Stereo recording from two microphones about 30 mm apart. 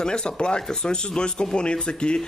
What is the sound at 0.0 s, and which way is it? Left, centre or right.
Speech, left.